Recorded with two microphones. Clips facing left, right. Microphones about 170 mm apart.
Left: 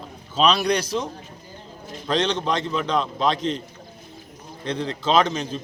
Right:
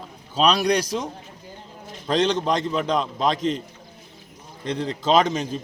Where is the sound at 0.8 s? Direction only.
40° right (ahead or behind).